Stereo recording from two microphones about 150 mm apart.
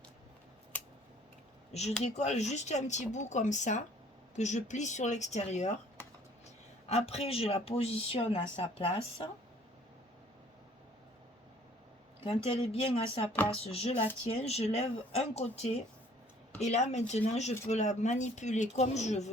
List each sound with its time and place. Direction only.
1.7 s speech: 45° left (ahead or behind)
6.8 s speech: 45° left (ahead or behind)
12.2 s speech: 40° left (ahead or behind)